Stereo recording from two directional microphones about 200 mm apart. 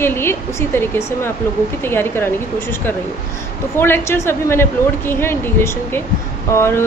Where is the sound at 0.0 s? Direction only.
10° left (ahead or behind).